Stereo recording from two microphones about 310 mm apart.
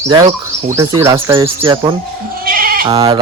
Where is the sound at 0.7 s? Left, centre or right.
Centre.